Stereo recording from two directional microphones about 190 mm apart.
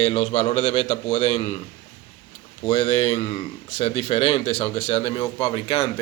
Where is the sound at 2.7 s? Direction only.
30° left (ahead or behind).